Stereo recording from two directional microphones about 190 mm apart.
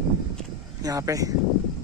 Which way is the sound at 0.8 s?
20° right (ahead or behind).